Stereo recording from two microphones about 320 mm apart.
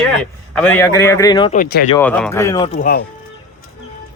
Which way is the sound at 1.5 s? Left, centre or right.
Left.